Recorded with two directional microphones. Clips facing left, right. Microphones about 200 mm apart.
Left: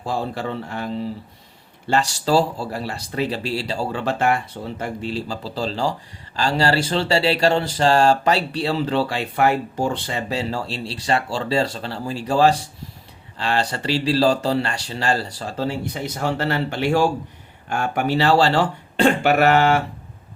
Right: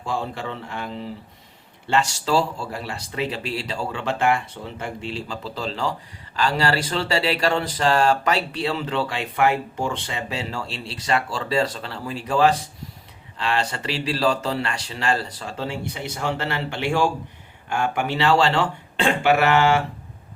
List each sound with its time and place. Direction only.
0.0 s speech: 35° left (ahead or behind)
1.9 s speech: 35° left (ahead or behind)